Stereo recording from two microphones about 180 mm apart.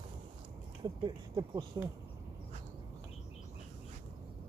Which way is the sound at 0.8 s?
20° right (ahead or behind).